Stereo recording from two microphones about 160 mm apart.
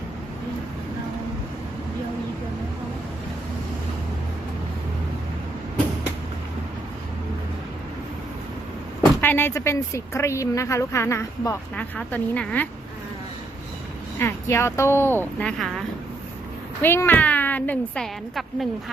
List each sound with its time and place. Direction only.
9.2 s speech: 15° left (ahead or behind)
14.2 s speech: 15° left (ahead or behind)
16.8 s speech: 15° left (ahead or behind)